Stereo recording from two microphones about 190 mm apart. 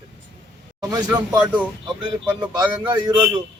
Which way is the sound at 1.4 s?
5° right (ahead or behind).